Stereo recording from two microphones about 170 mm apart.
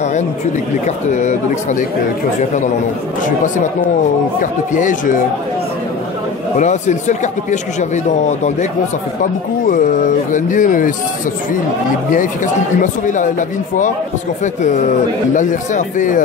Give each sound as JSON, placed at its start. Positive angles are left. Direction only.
{"t": 0.8, "sound": "speech", "side_deg": 45}
{"t": 3.3, "sound": "speech", "side_deg": 50}
{"t": 6.6, "sound": "speech", "side_deg": 45}
{"t": 10.3, "sound": "speech", "side_deg": 50}
{"t": 12.8, "sound": "speech", "side_deg": 50}